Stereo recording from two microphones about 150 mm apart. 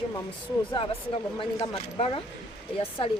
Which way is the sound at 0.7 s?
35° left (ahead or behind).